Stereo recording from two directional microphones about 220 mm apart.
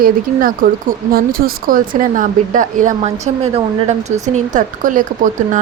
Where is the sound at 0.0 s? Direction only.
40° right (ahead or behind).